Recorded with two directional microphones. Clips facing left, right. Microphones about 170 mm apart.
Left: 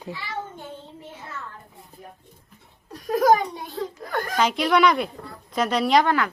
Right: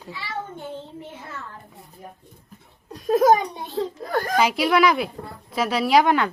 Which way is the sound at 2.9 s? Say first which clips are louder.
Right 2 dB; 20° right (ahead or behind).